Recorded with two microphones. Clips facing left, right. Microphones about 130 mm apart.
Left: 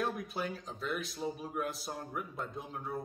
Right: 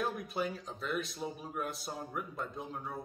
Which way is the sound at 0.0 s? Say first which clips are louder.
Right 1 dB; centre (ahead or behind).